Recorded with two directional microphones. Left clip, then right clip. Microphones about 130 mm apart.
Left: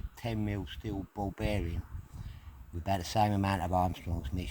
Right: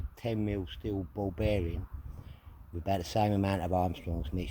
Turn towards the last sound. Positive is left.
turn(degrees=60)  # may be behind; listen again after turning